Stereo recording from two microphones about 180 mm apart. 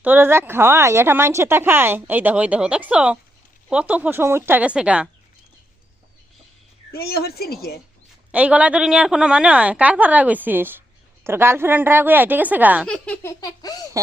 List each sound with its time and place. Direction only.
0.0 s a woman's voice: 10° right (ahead or behind)
6.9 s a woman's voice: 60° left (ahead or behind)
8.3 s a woman's voice: 5° right (ahead or behind)
12.9 s speech: 5° left (ahead or behind)
13.4 s speech: 20° left (ahead or behind)